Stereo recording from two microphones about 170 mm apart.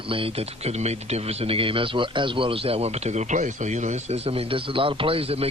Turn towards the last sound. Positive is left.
turn(degrees=-35)  # may be behind; listen again after turning